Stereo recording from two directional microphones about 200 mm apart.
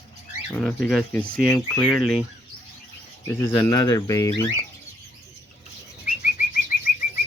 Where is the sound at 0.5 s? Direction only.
Centre (ahead or behind).